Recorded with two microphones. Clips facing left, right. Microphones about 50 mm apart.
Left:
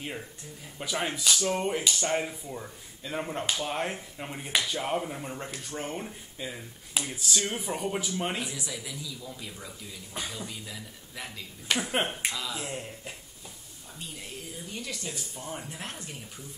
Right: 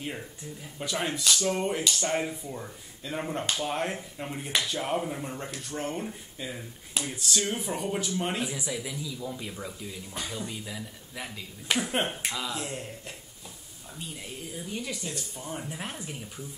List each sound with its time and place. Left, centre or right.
0.7 s speech: centre
8.5 s speech: centre
11.9 s speech: centre
12.3 s speech: centre
14.5 s speech: centre
15.8 s speech: centre